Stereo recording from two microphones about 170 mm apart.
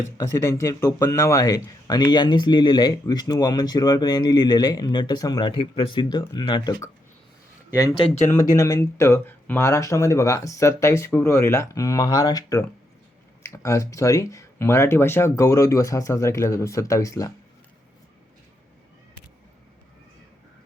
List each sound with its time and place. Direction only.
0.2 s speech: 20° left (ahead or behind)
7.9 s speech: 40° left (ahead or behind)
8.3 s speech: 20° left (ahead or behind)